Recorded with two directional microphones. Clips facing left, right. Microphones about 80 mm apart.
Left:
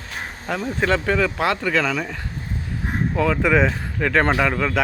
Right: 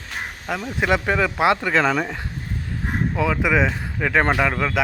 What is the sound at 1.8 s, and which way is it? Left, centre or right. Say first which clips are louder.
Speech: right 3 dB; right.